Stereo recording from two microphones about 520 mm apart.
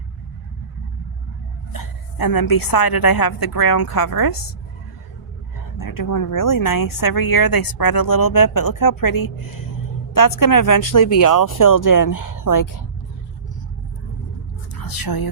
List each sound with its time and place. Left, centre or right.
1.7 s speech: left
5.7 s speech: left
14.8 s speech: left